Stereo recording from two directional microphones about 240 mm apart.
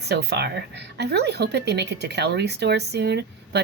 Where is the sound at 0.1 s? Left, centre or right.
Right.